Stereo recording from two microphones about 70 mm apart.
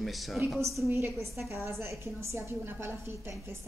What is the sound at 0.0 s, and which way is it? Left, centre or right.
Speech, centre.